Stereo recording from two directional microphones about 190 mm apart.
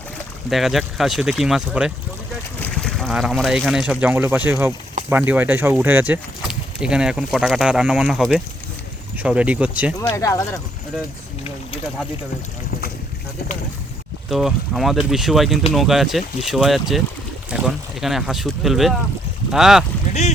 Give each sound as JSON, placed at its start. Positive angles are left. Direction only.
{"t": 0.5, "sound": "speech", "side_deg": 0}
{"t": 10.0, "sound": "speech", "side_deg": 15}
{"t": 14.3, "sound": "speech", "side_deg": 0}
{"t": 20.1, "sound": "boat", "side_deg": 40}